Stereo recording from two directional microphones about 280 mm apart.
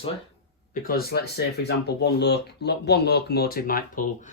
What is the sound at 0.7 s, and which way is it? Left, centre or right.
Speech, left.